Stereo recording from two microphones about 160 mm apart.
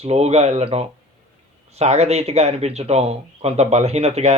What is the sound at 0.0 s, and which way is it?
Speech, 40° right (ahead or behind).